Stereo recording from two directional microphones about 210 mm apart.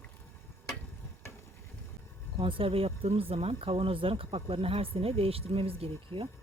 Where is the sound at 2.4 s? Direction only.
25° right (ahead or behind).